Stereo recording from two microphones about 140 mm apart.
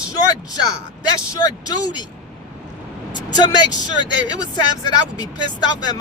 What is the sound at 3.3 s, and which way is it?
Speech, 30° left (ahead or behind).